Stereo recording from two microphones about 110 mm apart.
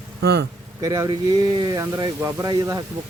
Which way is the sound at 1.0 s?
40° right (ahead or behind).